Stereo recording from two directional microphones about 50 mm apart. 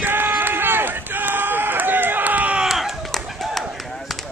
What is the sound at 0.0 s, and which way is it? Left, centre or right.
Run, right.